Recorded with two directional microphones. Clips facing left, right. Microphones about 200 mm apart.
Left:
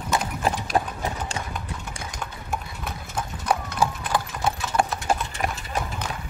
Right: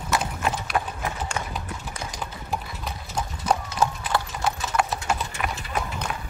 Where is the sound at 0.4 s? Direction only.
35° left (ahead or behind).